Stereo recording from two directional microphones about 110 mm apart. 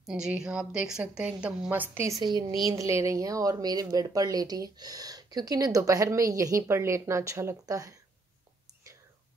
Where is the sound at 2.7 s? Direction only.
30° right (ahead or behind).